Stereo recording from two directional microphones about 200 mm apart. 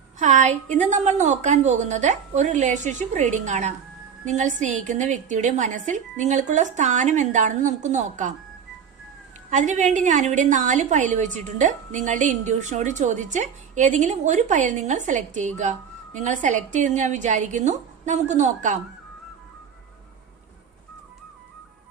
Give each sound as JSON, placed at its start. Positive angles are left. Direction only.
{"t": 0.2, "sound": "a woman's voice", "side_deg": -35}
{"t": 9.5, "sound": "a woman's voice", "side_deg": -40}